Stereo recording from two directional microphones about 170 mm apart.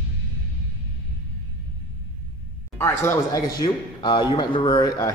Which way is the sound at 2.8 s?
15° left (ahead or behind).